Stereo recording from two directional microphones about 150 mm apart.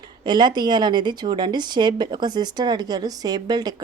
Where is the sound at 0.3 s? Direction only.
30° right (ahead or behind).